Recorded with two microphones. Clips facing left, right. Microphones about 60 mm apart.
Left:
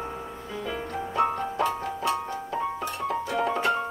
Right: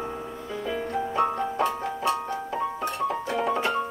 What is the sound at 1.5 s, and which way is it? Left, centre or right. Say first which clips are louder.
Music: right 1 dB; right.